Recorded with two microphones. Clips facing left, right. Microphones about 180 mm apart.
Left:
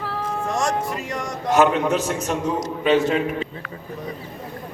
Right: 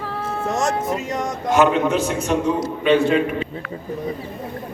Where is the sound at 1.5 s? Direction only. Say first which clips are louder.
Right 1 dB; 40° left (ahead or behind).